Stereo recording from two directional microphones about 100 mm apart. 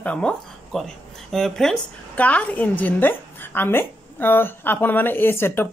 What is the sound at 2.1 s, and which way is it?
A woman's voice, 15° left (ahead or behind).